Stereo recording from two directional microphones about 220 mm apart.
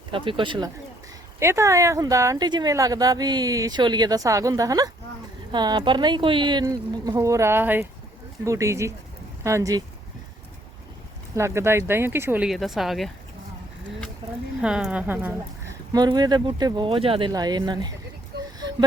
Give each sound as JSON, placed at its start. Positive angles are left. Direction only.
{"t": 0.1, "sound": "speech", "side_deg": -25}
{"t": 11.3, "sound": "speech", "side_deg": -10}
{"t": 14.6, "sound": "speech", "side_deg": -5}